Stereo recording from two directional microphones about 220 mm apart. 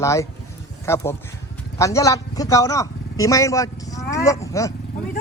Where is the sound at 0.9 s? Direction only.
10° left (ahead or behind).